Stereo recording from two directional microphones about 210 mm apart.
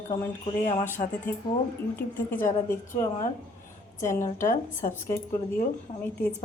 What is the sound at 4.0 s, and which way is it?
A woman's voice, 15° left (ahead or behind).